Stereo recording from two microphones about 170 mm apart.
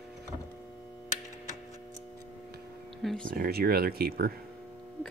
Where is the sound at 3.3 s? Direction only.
65° right (ahead or behind).